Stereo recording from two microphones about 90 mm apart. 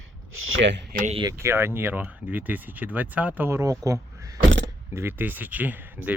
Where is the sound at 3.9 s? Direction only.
35° right (ahead or behind).